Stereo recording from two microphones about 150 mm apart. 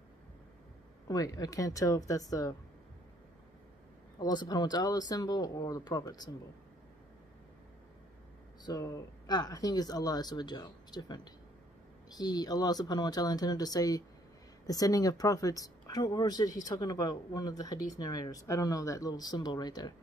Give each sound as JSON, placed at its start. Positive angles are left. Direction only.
{"t": 1.0, "sound": "speech", "side_deg": 25}
{"t": 4.2, "sound": "speech", "side_deg": 30}
{"t": 8.6, "sound": "speech", "side_deg": 25}